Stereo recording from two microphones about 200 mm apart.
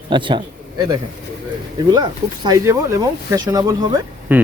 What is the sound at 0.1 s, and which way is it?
Speech, 25° right (ahead or behind).